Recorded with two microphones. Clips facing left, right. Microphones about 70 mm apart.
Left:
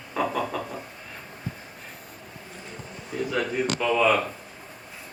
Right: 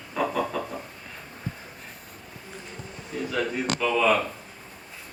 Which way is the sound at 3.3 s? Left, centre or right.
Centre.